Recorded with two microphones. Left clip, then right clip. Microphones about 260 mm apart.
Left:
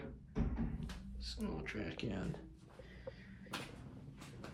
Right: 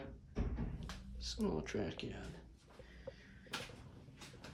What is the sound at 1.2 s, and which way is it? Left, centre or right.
Speech, centre.